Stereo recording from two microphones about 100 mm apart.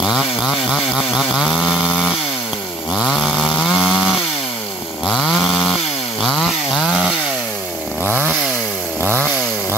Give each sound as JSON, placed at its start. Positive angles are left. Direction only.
{"t": 0.0, "sound": "chainsaw", "side_deg": 0}
{"t": 5.0, "sound": "chainsaw", "side_deg": 0}